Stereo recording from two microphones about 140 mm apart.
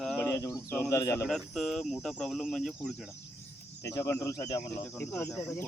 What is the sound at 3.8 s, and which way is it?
Speech, 20° left (ahead or behind).